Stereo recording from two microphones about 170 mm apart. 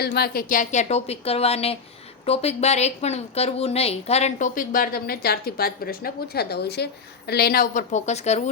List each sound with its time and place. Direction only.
0.0 s a woman's voice: 70° left (ahead or behind); by 8.4 s 40° left (ahead or behind)